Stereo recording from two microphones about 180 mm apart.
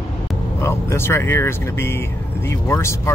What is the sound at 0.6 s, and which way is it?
Speech, 15° left (ahead or behind).